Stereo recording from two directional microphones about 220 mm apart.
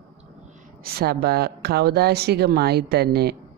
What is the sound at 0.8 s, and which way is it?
Speech, 45° right (ahead or behind).